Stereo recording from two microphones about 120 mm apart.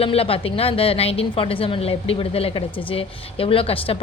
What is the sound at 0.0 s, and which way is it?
A woman's voice, 55° left (ahead or behind).